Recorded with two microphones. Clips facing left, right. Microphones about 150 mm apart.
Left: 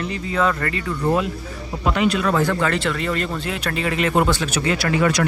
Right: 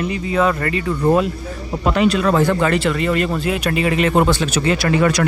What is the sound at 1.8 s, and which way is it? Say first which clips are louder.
Speech: right 3 dB; 40° right (ahead or behind).